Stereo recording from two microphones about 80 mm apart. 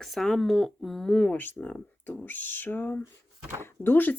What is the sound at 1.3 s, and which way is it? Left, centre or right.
Speech, left.